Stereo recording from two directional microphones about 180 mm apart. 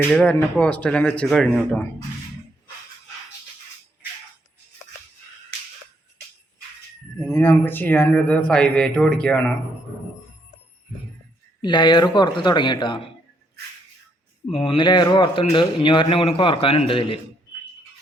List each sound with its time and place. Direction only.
0.1 s speech: 5° left (ahead or behind)
7.2 s speech: 15° left (ahead or behind)
11.6 s a man's voice: 25° left (ahead or behind)
14.5 s a man's voice: 30° left (ahead or behind)